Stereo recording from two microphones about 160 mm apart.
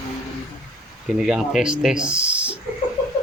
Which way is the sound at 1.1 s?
5° right (ahead or behind).